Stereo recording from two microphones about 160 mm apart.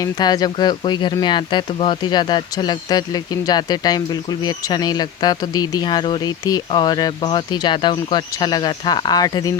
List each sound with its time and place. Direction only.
0.0 s speech: 25° left (ahead or behind)